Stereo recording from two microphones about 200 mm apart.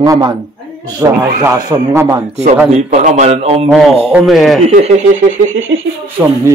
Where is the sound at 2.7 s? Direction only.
35° right (ahead or behind).